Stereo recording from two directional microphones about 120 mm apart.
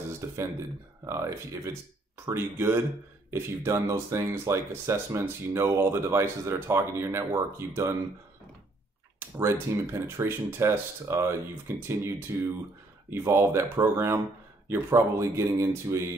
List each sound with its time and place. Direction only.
0.2 s speech: 25° right (ahead or behind)
9.4 s speech: 20° right (ahead or behind)